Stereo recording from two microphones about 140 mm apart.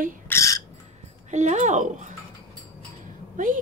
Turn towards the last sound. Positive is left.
turn(degrees=-70)  # may be behind; listen again after turning